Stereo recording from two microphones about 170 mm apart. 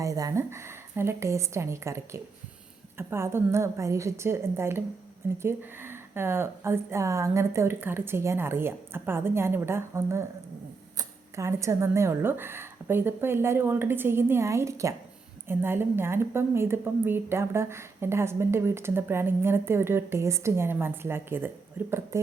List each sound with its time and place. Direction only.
0.0 s a woman's voice: 20° right (ahead or behind)